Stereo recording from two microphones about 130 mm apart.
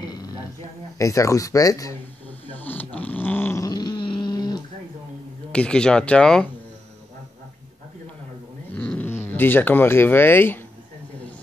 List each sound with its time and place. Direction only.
0.0 s a sound: 30° left (ahead or behind)
0.9 s speech: 25° left (ahead or behind)
2.4 s snoring: 15° left (ahead or behind)
3.6 s dog: 30° left (ahead or behind)
5.5 s speech: 5° left (ahead or behind)
8.7 s speech: 10° left (ahead or behind)